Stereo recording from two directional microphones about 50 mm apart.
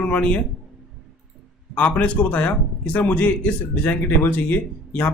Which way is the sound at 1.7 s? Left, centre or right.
Left.